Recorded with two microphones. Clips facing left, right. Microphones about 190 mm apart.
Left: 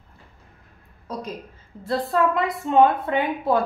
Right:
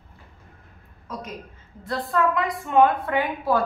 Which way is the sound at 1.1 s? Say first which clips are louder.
Left 3 dB; 35° left (ahead or behind).